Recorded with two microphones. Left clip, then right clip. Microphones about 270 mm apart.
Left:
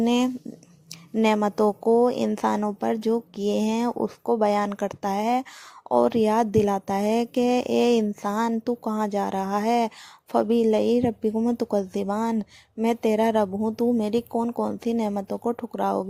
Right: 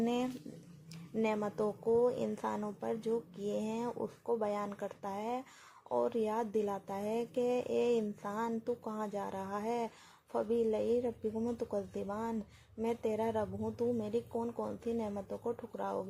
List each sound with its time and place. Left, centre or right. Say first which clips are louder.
0.0 s speech: left 12 dB; left